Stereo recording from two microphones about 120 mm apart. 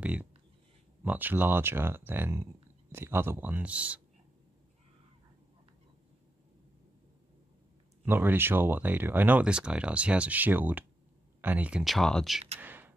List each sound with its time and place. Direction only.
0.0 s speech: 10° right (ahead or behind)
8.0 s speech: 15° right (ahead or behind)
11.8 s speech: centre (ahead or behind)
12.5 s a sound: 15° right (ahead or behind)